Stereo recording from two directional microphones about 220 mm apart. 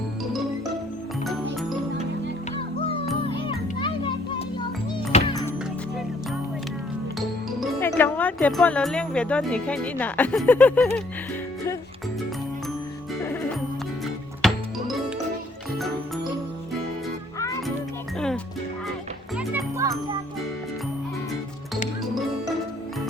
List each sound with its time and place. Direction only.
2.6 s music: 25° left (ahead or behind)
7.2 s music: centre (ahead or behind)
7.9 s speech: 10° left (ahead or behind)
14.4 s music: centre (ahead or behind)
19.4 s music: 10° right (ahead or behind)